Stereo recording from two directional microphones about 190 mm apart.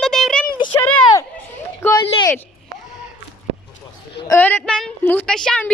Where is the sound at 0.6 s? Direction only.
10° left (ahead or behind).